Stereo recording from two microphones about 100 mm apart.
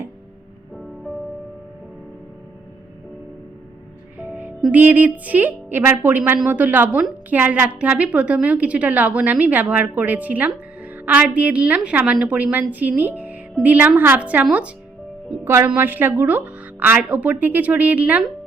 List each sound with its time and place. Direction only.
4.2 s music: 15° right (ahead or behind)
4.7 s a woman's voice: 15° right (ahead or behind)
15.4 s a woman's voice: 20° right (ahead or behind)